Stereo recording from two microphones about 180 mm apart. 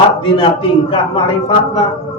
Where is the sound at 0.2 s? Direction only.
30° left (ahead or behind).